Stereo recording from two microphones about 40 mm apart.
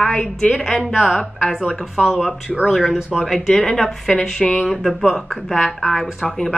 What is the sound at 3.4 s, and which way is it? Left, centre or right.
Speech, centre.